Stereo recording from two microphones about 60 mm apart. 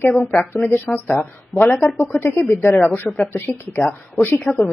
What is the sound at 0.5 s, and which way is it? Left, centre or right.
Speech, left.